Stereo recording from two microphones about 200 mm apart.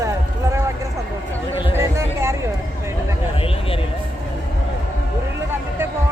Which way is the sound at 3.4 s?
30° left (ahead or behind).